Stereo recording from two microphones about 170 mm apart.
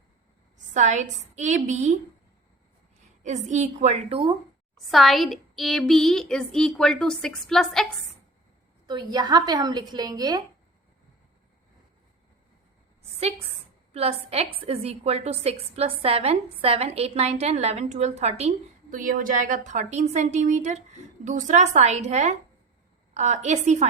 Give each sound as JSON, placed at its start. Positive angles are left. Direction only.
{"t": 0.7, "sound": "a woman's voice", "side_deg": -45}
{"t": 3.2, "sound": "a woman's voice", "side_deg": -45}
{"t": 4.9, "sound": "speech", "side_deg": 0}
{"t": 8.9, "sound": "a woman's voice", "side_deg": -25}
{"t": 13.0, "sound": "a sound", "side_deg": -35}
{"t": 13.9, "sound": "a woman's voice", "side_deg": -35}